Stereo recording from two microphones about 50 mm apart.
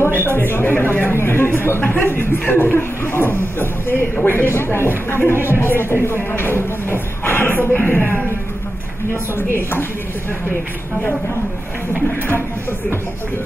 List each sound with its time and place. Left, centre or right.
0.0 s a sound: right
0.3 s speech: left
1.1 s speech: left
7.7 s music: left
9.6 s speech: left